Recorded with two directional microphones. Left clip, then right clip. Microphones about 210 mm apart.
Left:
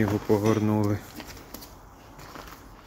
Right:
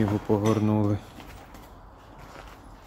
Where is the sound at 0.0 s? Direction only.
15° right (ahead or behind).